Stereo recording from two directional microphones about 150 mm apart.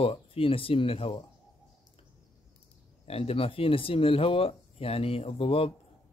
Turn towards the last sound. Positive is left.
turn(degrees=40)  # may be behind; listen again after turning